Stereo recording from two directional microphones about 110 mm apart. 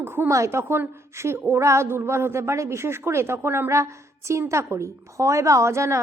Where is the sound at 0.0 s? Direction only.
20° right (ahead or behind).